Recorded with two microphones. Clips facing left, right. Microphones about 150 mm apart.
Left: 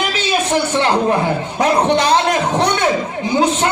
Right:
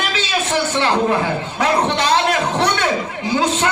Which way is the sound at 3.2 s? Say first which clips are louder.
Left 3 dB; 15° left (ahead or behind).